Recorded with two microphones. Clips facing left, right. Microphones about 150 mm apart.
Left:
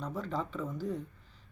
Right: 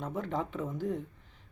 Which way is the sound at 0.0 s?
20° right (ahead or behind).